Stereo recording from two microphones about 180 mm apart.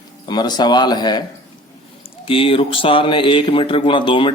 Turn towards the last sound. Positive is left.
turn(degrees=25)  # may be behind; listen again after turning